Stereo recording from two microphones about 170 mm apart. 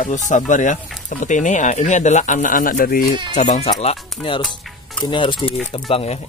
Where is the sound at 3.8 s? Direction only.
35° left (ahead or behind).